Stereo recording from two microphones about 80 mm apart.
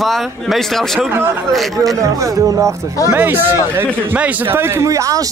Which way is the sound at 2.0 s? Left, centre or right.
Right.